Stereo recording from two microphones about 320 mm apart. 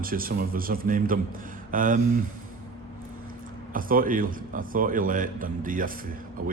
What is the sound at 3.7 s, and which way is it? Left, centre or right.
A man's voice, right.